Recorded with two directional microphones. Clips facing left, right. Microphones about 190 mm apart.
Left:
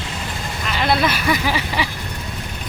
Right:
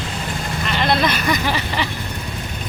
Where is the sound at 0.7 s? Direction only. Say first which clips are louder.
Even; 5° left (ahead or behind).